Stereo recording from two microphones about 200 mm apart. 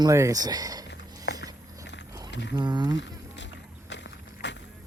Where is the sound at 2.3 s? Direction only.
60° left (ahead or behind).